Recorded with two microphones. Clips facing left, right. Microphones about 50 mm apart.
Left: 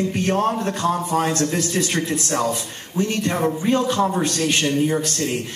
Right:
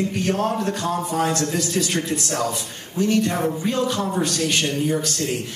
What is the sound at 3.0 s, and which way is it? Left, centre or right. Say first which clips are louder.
A man's voice: right 1 dB; left.